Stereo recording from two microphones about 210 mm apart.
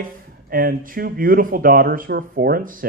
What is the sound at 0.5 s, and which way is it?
Speech, 45° right (ahead or behind).